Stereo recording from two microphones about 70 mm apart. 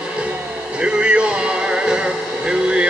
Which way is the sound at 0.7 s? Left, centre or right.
Centre.